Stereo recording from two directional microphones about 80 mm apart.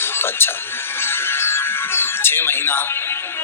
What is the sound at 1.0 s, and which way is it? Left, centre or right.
Music, left.